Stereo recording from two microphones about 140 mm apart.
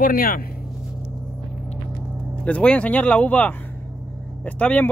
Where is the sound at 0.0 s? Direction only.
90° left.